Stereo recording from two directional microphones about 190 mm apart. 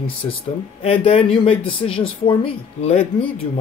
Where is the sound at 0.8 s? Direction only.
30° left (ahead or behind).